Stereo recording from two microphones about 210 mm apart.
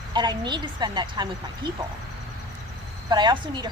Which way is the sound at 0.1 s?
20° right (ahead or behind).